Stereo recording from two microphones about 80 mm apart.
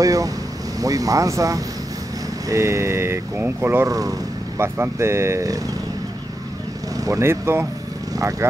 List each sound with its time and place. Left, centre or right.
0.0 s speech: right
3.8 s speech: right
4.6 s speech: right
7.1 s speech: right
8.2 s speech: right